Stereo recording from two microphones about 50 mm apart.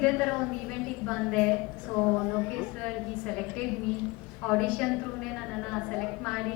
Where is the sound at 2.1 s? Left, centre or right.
Centre.